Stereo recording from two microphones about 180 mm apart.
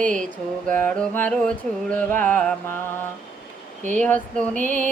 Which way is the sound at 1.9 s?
5° left (ahead or behind).